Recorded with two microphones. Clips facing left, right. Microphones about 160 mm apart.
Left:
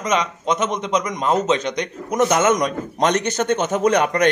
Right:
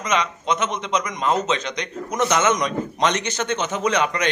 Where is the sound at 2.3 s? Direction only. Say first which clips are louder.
Left 1 dB; 45° left (ahead or behind).